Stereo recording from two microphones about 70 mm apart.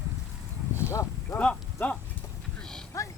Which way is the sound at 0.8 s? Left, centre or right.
Left.